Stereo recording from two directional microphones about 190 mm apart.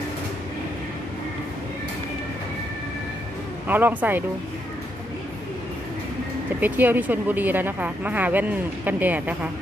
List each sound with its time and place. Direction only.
3.7 s speech: 10° right (ahead or behind)
6.6 s speech: 10° right (ahead or behind)